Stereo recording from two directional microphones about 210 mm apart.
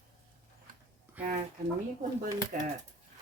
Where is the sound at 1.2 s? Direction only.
5° right (ahead or behind).